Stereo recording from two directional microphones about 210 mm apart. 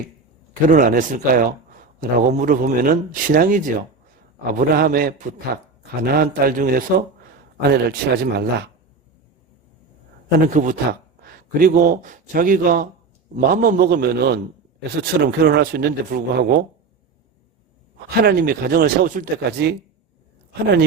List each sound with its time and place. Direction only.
0.7 s a man's voice: 40° right (ahead or behind)
10.4 s a man's voice: 40° right (ahead or behind)
18.1 s a man's voice: 50° right (ahead or behind)